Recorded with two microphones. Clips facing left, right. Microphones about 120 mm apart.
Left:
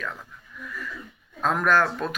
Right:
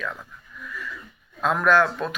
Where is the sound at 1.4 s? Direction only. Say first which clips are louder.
Right 2 dB; 45° left (ahead or behind).